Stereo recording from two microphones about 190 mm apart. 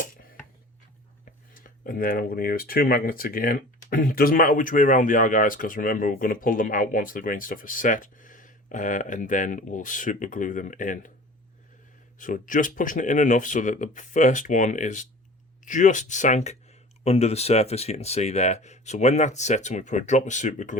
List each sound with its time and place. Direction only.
1.5 s speech: 45° left (ahead or behind)
12.2 s speech: 45° left (ahead or behind)